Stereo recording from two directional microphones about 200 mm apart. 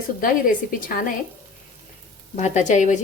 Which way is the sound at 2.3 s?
35° left (ahead or behind).